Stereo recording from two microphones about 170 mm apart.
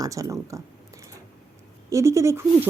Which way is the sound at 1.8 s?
15° right (ahead or behind).